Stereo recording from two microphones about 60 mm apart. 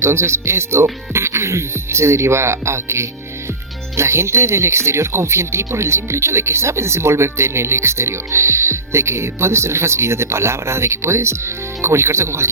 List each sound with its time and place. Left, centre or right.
0.0 s speech: right